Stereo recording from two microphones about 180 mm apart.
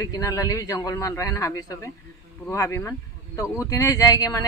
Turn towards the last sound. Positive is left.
turn(degrees=20)  # may be behind; listen again after turning